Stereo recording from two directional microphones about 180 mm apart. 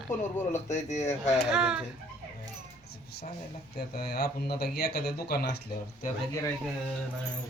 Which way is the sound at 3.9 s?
65° left (ahead or behind).